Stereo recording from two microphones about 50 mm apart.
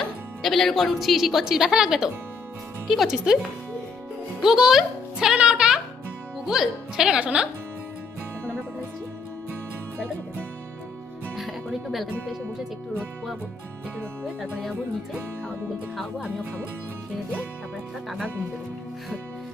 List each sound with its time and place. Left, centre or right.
0.4 s a woman's voice: centre
4.4 s a child's voice: centre
5.4 s music: centre
6.5 s speech: centre
7.2 s speech: right
11.3 s speech: centre